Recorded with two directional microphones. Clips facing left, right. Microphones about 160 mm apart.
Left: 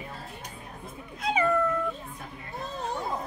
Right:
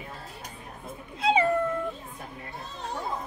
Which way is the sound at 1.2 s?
30° right (ahead or behind).